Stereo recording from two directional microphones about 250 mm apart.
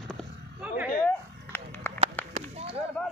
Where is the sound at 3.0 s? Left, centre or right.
Centre.